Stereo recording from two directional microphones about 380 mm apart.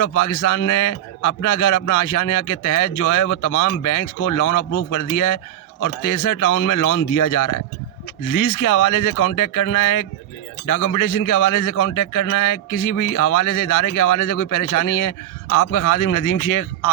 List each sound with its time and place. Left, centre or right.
0.0 s a man's voice: left